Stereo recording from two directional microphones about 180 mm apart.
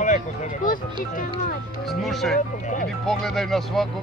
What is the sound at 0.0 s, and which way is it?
Speech, 45° left (ahead or behind).